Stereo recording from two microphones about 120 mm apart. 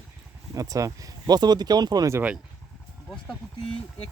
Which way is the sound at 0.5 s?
30° right (ahead or behind).